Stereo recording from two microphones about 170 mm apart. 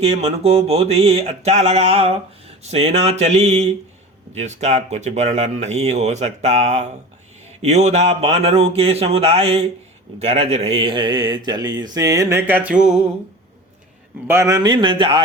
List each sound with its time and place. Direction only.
0.0 s speech: 35° right (ahead or behind); by 13.0 s 5° right (ahead or behind)
14.3 s speech: 15° right (ahead or behind)